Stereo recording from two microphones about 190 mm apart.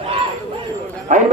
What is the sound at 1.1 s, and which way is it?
Speech, 40° right (ahead or behind).